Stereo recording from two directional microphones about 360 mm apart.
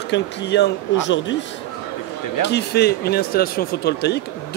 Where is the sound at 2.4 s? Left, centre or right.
Left.